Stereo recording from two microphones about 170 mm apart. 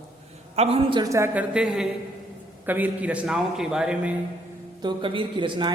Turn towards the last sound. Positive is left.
turn(degrees=-30)  # may be behind; listen again after turning